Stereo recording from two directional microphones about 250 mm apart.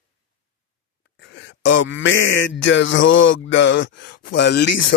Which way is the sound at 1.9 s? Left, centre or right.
Left.